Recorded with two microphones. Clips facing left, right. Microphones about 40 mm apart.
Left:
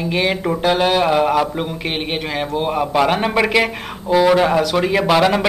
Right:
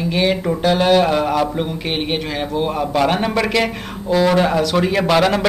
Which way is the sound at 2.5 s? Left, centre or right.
Centre.